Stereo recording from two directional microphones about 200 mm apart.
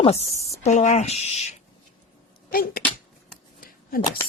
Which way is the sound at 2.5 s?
45° left (ahead or behind).